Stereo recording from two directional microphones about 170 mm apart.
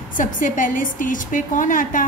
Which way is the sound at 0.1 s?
50° left (ahead or behind).